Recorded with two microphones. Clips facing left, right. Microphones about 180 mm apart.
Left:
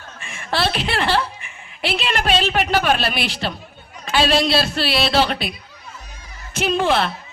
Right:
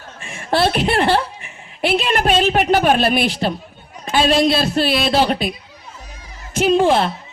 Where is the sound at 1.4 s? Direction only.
50° right (ahead or behind).